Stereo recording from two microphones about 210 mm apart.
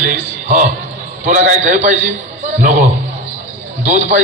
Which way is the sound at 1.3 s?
35° right (ahead or behind).